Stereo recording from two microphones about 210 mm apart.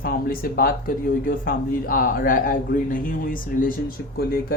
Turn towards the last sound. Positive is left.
turn(degrees=45)  # may be behind; listen again after turning